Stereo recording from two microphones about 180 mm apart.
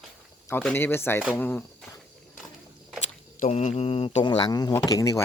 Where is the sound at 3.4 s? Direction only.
35° left (ahead or behind); by 5.2 s 20° left (ahead or behind).